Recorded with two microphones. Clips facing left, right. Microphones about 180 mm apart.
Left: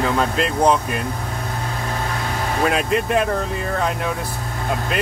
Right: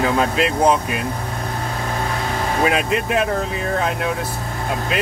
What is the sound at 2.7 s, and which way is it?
Speech, centre (ahead or behind).